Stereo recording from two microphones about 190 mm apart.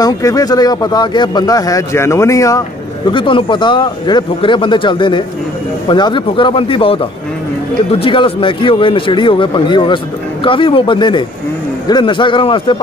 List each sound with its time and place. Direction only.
0.0 s speech: 20° left (ahead or behind)